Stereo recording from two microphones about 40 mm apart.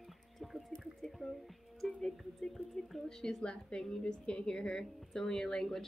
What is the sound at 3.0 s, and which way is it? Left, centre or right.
A woman's voice, left.